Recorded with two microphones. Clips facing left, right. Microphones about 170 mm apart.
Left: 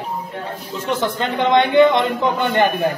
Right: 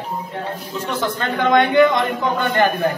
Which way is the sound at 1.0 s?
20° left (ahead or behind).